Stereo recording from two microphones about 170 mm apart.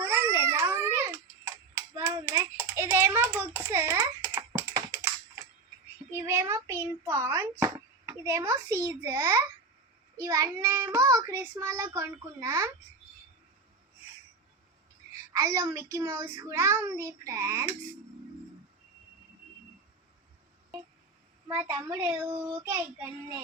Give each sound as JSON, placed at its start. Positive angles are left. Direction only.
{"t": 0.0, "sound": "baby cry", "side_deg": -15}
{"t": 6.1, "sound": "a child's voice", "side_deg": -15}
{"t": 15.3, "sound": "a child's voice", "side_deg": -15}
{"t": 21.4, "sound": "a child's voice", "side_deg": -20}